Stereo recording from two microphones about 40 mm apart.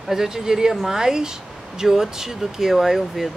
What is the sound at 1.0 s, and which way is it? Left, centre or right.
Speech, centre.